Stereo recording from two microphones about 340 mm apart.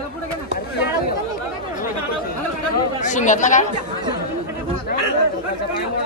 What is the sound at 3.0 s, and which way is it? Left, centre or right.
Speech, left.